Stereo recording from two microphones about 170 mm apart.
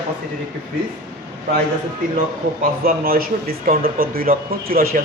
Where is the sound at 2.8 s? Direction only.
60° right (ahead or behind).